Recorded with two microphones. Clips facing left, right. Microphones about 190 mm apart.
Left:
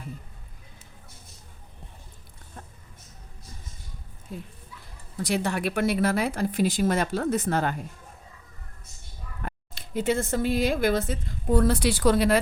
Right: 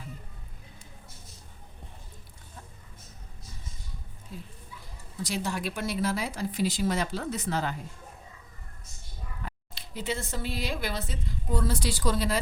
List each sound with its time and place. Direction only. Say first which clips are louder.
5.1 s speech: left 5 dB; 60° left (ahead or behind)
9.4 s speech: left 7 dB; 55° left (ahead or behind)